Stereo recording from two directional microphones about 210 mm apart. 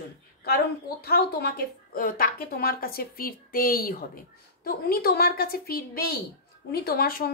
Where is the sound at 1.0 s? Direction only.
45° left (ahead or behind).